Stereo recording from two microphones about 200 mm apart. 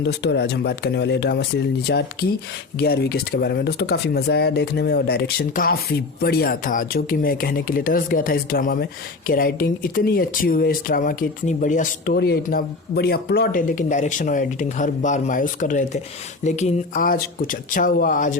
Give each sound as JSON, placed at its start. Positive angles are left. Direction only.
{"t": 0.0, "sound": "speech", "side_deg": 60}